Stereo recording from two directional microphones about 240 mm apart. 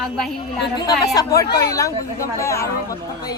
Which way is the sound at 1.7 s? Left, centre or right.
Centre.